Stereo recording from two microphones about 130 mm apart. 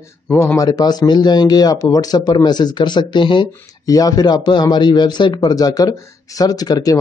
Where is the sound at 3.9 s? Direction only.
30° left (ahead or behind).